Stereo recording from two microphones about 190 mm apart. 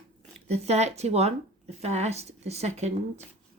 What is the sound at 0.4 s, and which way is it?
Speech, 35° right (ahead or behind).